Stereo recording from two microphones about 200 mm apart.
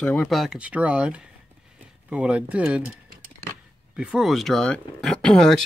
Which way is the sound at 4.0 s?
5° right (ahead or behind).